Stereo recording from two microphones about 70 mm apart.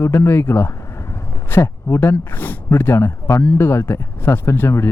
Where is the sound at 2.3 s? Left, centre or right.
Left.